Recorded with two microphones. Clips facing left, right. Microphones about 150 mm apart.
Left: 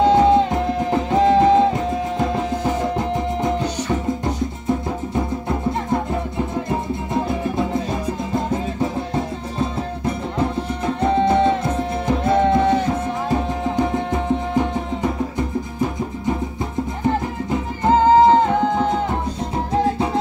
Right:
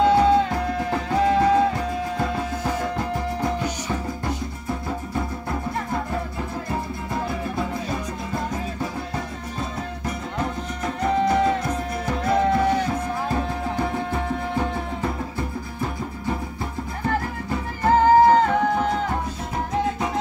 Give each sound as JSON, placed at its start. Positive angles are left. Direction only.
{"t": 0.0, "sound": "music", "side_deg": 20}
{"t": 11.0, "sound": "music", "side_deg": 25}
{"t": 17.0, "sound": "music", "side_deg": 20}